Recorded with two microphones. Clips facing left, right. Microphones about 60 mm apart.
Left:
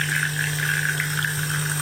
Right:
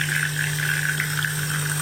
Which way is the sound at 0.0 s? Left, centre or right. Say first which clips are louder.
Even; centre.